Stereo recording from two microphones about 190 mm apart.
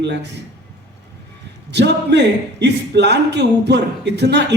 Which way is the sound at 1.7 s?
65° right (ahead or behind).